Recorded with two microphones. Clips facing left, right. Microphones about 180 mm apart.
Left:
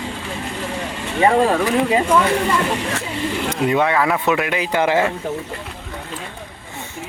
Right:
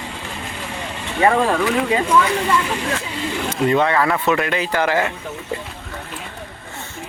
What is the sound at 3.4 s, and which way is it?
Speech, 10° left (ahead or behind).